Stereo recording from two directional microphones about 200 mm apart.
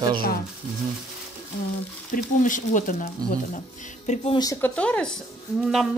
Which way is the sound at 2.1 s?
40° left (ahead or behind).